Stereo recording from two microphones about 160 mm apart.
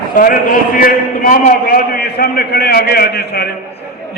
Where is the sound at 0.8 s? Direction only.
65° left (ahead or behind); by 3.4 s 85° left.